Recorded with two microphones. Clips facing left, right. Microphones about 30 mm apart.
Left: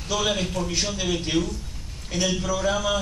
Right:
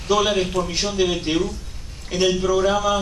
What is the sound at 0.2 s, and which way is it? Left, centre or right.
Speech, right.